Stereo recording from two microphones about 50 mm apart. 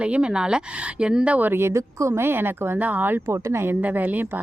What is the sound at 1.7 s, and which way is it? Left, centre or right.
Speech, right.